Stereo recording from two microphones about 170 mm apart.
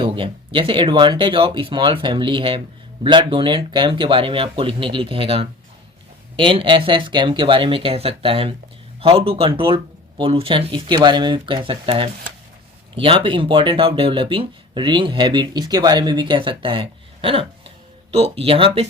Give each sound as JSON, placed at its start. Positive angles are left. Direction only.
{"t": 0.0, "sound": "speech", "side_deg": -30}